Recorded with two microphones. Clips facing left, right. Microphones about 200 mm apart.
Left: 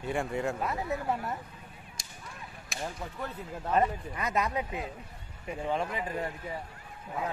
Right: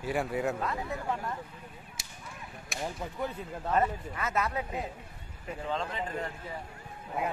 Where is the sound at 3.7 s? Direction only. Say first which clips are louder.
Left 1 dB; 15° left (ahead or behind).